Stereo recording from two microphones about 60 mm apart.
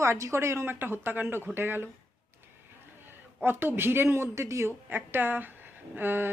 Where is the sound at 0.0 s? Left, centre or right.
Right.